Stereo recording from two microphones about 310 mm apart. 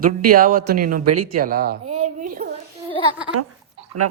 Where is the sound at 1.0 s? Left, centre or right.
Right.